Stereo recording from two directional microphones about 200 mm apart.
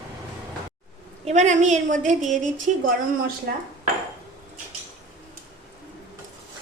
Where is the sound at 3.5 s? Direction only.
55° right (ahead or behind).